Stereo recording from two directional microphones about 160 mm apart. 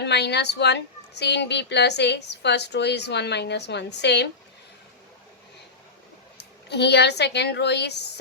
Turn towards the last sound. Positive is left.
turn(degrees=90)